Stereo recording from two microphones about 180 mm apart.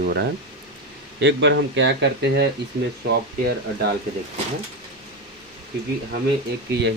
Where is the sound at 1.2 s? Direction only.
75° right (ahead or behind).